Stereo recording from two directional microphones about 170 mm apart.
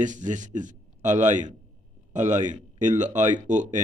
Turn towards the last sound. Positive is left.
turn(degrees=-45)  # may be behind; listen again after turning